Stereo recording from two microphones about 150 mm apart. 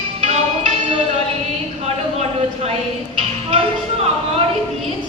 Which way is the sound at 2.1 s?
45° right (ahead or behind).